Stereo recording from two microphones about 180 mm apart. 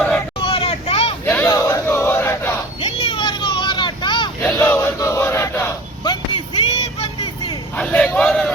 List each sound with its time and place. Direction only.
0.4 s vehicle: 30° left (ahead or behind)
1.2 s crowd: 10° left (ahead or behind)
2.8 s vehicle: 25° left (ahead or behind)
4.4 s battle cry: 10° left (ahead or behind)
6.3 s music: 30° left (ahead or behind)
7.8 s a sound: 5° left (ahead or behind)